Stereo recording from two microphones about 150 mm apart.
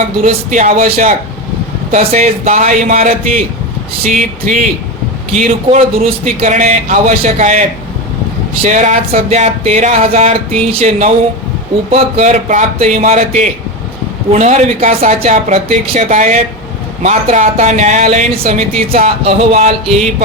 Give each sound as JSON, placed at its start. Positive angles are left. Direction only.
{"t": 0.3, "sound": "speech", "side_deg": -55}
{"t": 8.6, "sound": "speech", "side_deg": -55}
{"t": 12.1, "sound": "speech", "side_deg": -50}